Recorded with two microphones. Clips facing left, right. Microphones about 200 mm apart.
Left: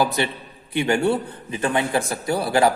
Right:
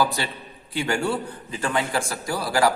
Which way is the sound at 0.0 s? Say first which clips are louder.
Left 3 dB; 20° left (ahead or behind).